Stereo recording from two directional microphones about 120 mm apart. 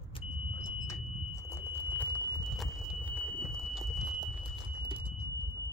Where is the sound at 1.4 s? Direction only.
20° left (ahead or behind).